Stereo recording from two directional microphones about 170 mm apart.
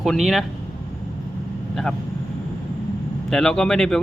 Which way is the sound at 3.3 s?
5° left (ahead or behind).